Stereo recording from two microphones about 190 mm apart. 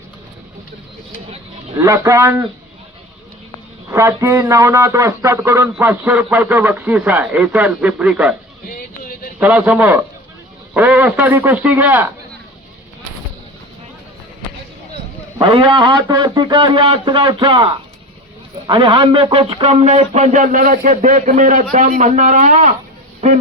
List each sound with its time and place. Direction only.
1.8 s a man's voice: 15° right (ahead or behind)
3.8 s a man's voice: 15° right (ahead or behind)
8.7 s a sound: 50° left (ahead or behind)
9.4 s a man's voice: 10° right (ahead or behind)
15.4 s a man's voice: 25° right (ahead or behind)